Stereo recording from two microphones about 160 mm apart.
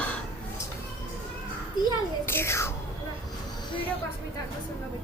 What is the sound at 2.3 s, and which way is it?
Speech, 15° left (ahead or behind).